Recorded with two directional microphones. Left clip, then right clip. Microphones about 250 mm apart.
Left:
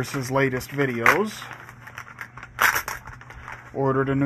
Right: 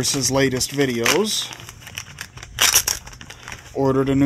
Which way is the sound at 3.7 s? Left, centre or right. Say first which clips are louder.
Right 4 dB; right.